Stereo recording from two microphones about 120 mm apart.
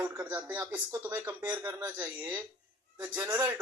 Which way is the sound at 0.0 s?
15° right (ahead or behind).